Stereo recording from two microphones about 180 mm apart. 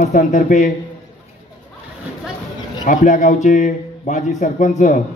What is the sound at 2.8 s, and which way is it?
A man's voice, 40° left (ahead or behind).